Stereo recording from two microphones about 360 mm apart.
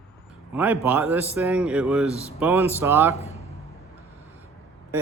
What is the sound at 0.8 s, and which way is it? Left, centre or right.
A man's voice, centre.